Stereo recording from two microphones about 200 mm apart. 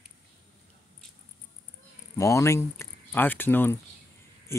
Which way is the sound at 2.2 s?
15° left (ahead or behind).